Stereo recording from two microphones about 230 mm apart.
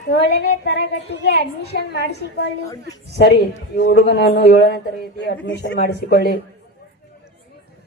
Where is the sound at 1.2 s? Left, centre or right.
Left.